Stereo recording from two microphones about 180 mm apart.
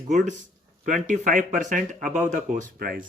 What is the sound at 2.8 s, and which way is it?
Speech, 50° right (ahead or behind).